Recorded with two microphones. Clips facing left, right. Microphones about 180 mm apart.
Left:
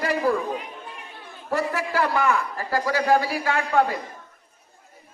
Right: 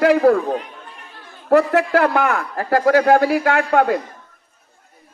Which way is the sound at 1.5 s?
60° right (ahead or behind).